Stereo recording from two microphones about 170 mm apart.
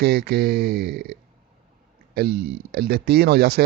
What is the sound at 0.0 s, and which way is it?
Speech, 65° right (ahead or behind).